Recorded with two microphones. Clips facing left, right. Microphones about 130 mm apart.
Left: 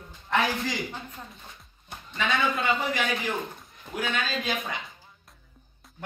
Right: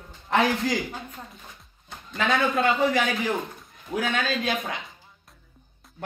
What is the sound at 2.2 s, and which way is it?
Speech, 55° right (ahead or behind).